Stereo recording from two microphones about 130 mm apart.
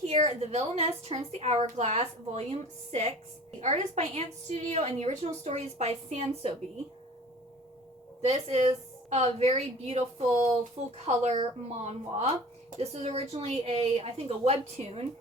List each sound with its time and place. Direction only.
0.0 s a woman's voice: 55° right (ahead or behind)
8.3 s a woman's voice: 55° right (ahead or behind)